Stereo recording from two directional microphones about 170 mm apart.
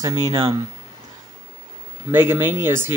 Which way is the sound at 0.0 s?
20° right (ahead or behind).